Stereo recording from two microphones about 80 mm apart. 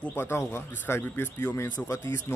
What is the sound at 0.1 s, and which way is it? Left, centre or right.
Speech, left.